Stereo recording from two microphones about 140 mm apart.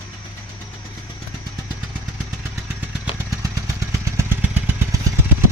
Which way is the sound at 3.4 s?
20° right (ahead or behind).